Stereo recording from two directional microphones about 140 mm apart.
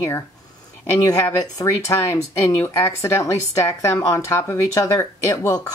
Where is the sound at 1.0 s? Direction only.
25° left (ahead or behind).